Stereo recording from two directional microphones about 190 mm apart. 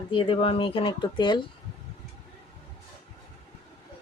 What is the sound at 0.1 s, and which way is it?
Speech, 30° left (ahead or behind).